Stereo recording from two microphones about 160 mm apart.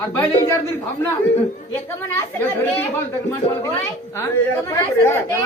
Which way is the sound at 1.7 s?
15° left (ahead or behind).